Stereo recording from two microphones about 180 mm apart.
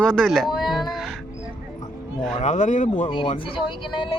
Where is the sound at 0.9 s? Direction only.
Centre (ahead or behind).